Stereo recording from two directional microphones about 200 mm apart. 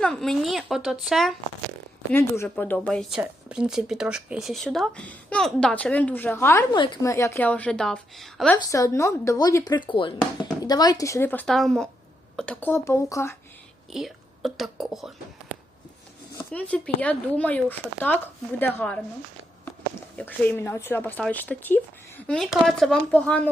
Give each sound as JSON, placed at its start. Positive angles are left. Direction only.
{"t": 0.0, "sound": "speech", "side_deg": 5}
{"t": 2.1, "sound": "speech", "side_deg": 10}
{"t": 6.7, "sound": "a woman's voice", "side_deg": 25}
{"t": 8.5, "sound": "a woman's voice", "side_deg": 15}
{"t": 13.9, "sound": "a woman's voice", "side_deg": 0}
{"t": 20.1, "sound": "a woman's voice", "side_deg": 10}